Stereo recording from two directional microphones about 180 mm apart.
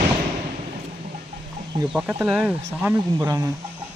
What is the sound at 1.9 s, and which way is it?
Speech, 5° right (ahead or behind).